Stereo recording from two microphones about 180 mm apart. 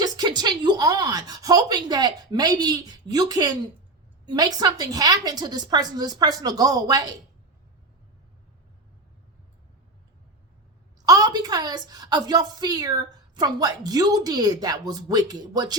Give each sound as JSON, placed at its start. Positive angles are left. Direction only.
{"t": 0.0, "sound": "a woman's voice", "side_deg": -25}
{"t": 11.0, "sound": "a woman's voice", "side_deg": -20}